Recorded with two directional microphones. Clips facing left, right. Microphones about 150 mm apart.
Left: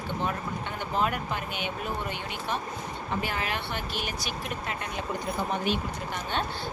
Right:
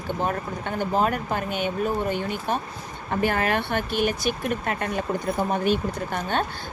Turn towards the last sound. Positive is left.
turn(degrees=-45)  # may be behind; listen again after turning